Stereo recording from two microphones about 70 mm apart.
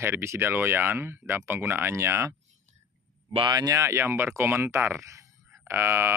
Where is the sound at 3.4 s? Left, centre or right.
Right.